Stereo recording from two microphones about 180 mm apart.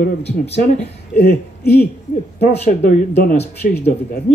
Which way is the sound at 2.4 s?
55° left (ahead or behind).